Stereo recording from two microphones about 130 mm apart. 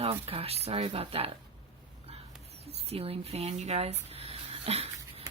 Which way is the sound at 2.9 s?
50° right (ahead or behind).